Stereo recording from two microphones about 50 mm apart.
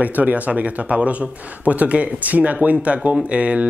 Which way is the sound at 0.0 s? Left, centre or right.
Right.